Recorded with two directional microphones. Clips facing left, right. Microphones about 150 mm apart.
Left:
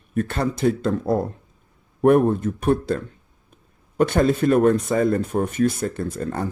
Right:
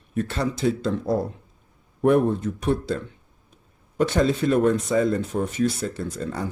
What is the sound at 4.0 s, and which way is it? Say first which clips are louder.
Speech: left 3 dB; 55° left (ahead or behind).